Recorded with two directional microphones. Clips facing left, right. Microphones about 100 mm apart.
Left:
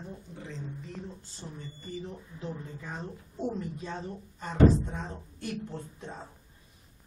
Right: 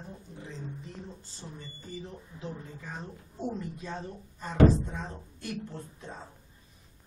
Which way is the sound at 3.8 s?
20° left (ahead or behind).